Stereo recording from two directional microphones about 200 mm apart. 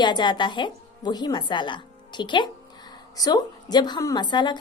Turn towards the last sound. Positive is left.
turn(degrees=20)  # may be behind; listen again after turning